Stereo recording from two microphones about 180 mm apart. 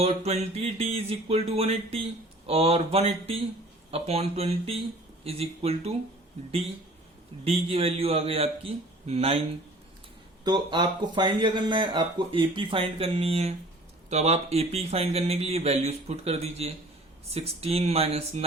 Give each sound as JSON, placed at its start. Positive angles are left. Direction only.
{"t": 0.0, "sound": "speech", "side_deg": -35}
{"t": 7.4, "sound": "speech", "side_deg": -35}
{"t": 10.4, "sound": "speech", "side_deg": -25}